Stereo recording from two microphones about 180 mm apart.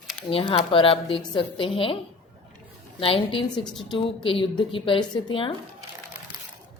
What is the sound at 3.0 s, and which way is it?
Speech, 30° left (ahead or behind).